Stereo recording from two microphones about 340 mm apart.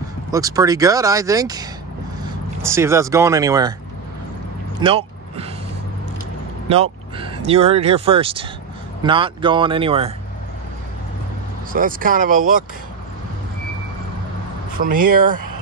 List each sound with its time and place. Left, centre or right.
0.3 s speech: centre
4.7 s vehicle: centre
6.7 s speech: centre
11.7 s speech: right
14.8 s speech: right